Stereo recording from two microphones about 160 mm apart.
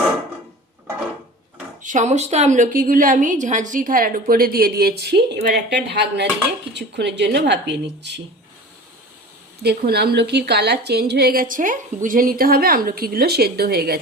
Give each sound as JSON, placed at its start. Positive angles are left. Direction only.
{"t": 1.8, "sound": "a woman's voice", "side_deg": -50}
{"t": 9.6, "sound": "a woman's voice", "side_deg": -90}